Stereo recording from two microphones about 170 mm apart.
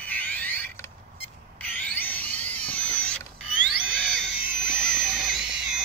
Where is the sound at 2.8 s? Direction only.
10° left (ahead or behind).